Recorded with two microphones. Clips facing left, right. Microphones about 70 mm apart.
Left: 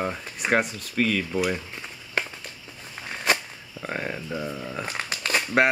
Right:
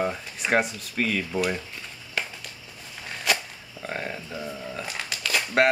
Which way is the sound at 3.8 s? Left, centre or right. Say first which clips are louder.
Left 2 dB; centre.